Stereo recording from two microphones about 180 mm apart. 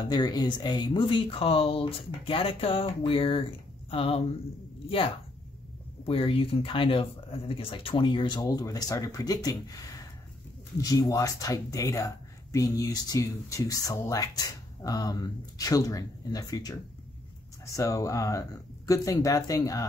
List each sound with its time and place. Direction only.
0.0 s speech: 25° left (ahead or behind)